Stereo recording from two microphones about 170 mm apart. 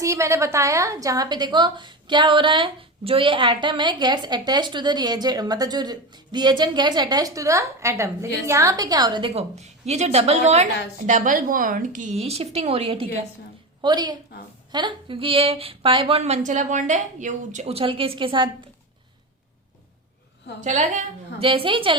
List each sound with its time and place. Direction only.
0.0 s a woman's voice: 15° right (ahead or behind)
20.7 s a woman's voice: 45° right (ahead or behind)
21.4 s speech: 30° right (ahead or behind)